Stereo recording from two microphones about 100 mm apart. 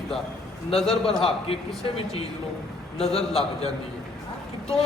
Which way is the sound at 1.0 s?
70° left (ahead or behind).